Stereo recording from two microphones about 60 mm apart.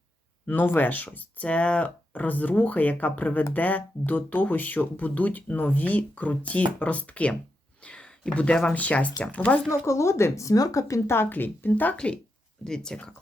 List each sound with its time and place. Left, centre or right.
0.4 s speech: left
9.8 s speech: left
11.3 s a woman's voice: left
11.9 s speech: centre